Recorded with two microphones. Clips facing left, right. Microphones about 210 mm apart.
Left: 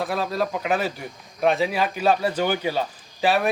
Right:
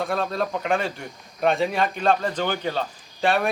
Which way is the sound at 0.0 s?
5° left (ahead or behind).